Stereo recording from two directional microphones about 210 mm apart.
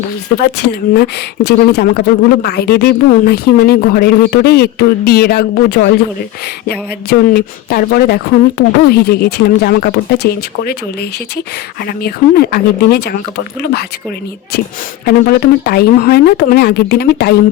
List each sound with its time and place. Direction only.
0.3 s speech: 50° left (ahead or behind)
11.9 s speech: 45° left (ahead or behind)
15.0 s speech: 50° left (ahead or behind)